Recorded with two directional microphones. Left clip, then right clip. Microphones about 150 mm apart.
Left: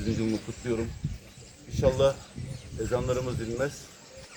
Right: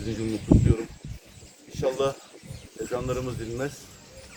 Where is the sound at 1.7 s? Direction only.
10° right (ahead or behind).